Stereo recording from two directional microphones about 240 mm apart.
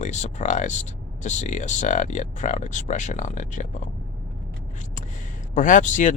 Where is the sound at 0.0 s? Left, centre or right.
Left.